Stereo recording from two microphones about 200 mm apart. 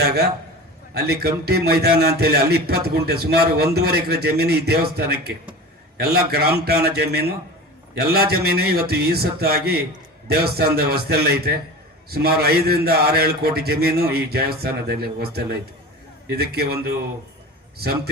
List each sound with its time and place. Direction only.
0.0 s a man's voice: 50° right (ahead or behind)